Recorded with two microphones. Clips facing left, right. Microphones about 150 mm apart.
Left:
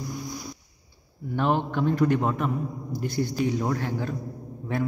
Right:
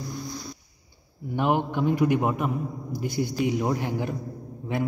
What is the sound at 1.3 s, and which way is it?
A man's voice, 15° right (ahead or behind).